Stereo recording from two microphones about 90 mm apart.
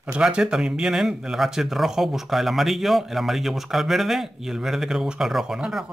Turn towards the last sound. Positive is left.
turn(degrees=-5)  # may be behind; listen again after turning